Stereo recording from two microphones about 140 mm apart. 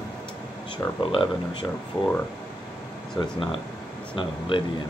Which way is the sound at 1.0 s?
35° left (ahead or behind).